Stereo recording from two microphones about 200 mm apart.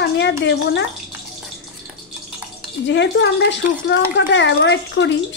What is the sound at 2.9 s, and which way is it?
Speech, 65° left (ahead or behind).